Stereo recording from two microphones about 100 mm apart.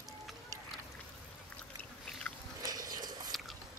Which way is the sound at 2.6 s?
40° right (ahead or behind).